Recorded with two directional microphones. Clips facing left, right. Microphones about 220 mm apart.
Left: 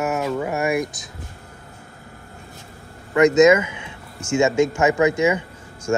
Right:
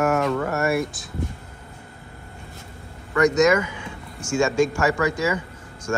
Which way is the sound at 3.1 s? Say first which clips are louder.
Left 4 dB; 20° left (ahead or behind).